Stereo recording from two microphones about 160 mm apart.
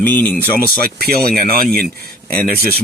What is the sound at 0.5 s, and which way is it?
Speech, 70° right (ahead or behind).